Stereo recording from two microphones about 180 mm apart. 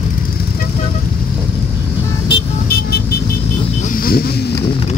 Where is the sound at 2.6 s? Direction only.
60° left (ahead or behind).